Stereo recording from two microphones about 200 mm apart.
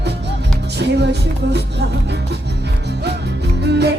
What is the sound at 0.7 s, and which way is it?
Music, 55° right (ahead or behind).